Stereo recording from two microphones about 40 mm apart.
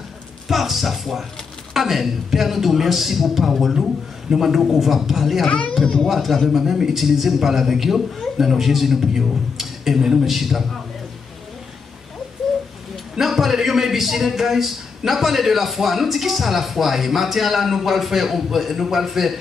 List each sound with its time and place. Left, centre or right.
0.5 s a man's voice: centre
5.5 s speech: left
6.0 s a man's voice: centre
13.2 s a man's voice: centre